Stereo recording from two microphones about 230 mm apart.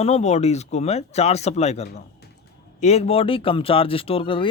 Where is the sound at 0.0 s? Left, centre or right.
Left.